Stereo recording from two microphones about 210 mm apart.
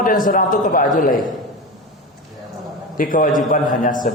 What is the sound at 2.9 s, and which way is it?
A man's voice, 40° left (ahead or behind).